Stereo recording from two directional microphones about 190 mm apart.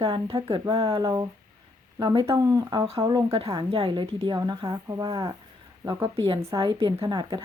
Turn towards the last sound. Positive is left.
turn(degrees=-25)  # may be behind; listen again after turning